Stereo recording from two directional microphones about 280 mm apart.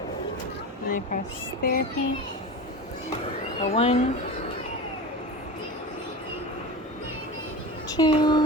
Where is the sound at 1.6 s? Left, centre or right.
Left.